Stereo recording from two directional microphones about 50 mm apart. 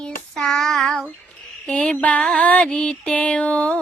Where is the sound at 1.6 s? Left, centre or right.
Centre.